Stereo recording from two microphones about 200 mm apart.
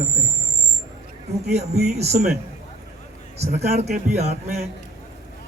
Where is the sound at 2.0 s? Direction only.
35° right (ahead or behind).